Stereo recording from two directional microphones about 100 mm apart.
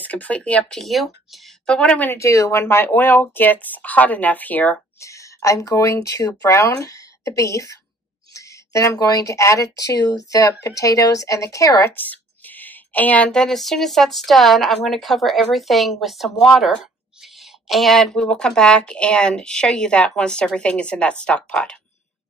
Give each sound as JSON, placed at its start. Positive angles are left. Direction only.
{"t": 0.0, "sound": "speech", "side_deg": 15}
{"t": 2.1, "sound": "speech", "side_deg": 30}
{"t": 5.0, "sound": "a woman's voice", "side_deg": 30}
{"t": 11.9, "sound": "speech", "side_deg": 20}